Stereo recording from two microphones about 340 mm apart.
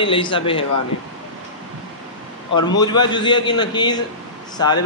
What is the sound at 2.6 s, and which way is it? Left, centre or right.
A man's voice, centre.